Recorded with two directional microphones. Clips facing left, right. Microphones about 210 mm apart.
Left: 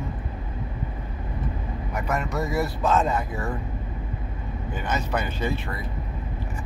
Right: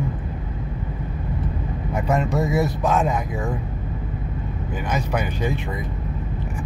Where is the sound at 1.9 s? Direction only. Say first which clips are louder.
Right 6 dB; 30° right (ahead or behind); by 3.4 s 15° right (ahead or behind).